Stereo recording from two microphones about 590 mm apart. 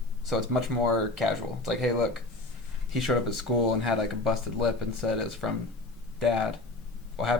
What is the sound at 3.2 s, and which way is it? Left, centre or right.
Speech, right.